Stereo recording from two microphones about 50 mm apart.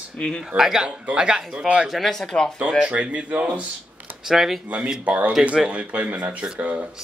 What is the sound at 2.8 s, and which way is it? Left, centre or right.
Speech, right.